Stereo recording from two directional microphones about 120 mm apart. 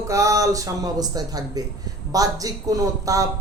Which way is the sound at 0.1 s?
25° right (ahead or behind).